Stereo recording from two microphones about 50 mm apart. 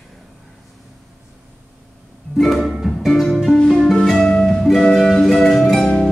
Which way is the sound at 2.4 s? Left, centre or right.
Centre.